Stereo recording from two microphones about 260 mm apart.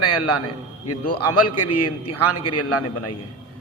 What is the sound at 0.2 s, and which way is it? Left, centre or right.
A man's voice, left.